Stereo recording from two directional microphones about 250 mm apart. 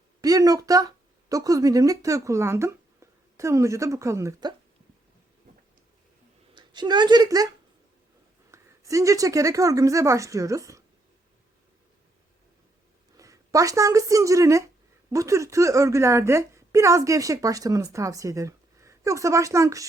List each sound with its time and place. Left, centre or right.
0.2 s speech: centre
6.5 s a woman's voice: centre
13.1 s a woman's voice: centre